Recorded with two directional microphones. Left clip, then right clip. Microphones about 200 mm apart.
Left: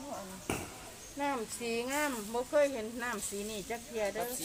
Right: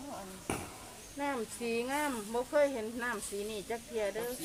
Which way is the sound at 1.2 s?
20° left (ahead or behind).